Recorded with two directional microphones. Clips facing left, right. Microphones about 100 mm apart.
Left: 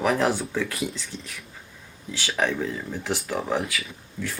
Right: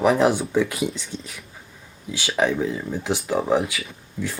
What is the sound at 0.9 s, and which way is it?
Speech, 20° right (ahead or behind).